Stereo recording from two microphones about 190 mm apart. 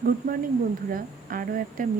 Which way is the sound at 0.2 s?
45° right (ahead or behind).